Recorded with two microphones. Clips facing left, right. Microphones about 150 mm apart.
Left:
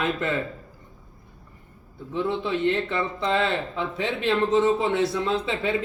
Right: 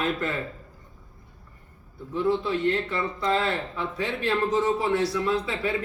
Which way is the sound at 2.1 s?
20° left (ahead or behind).